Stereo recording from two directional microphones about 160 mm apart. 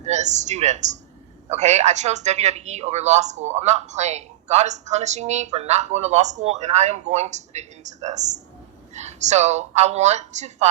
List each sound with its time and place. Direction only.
0.1 s a woman's voice: 45° right (ahead or behind)